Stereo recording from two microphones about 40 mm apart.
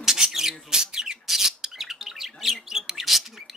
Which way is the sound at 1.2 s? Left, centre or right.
Centre.